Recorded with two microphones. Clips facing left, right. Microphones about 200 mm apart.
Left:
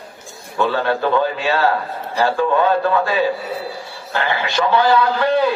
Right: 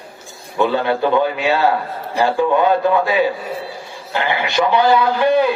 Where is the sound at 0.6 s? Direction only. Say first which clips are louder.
Right 2 dB; 15° right (ahead or behind).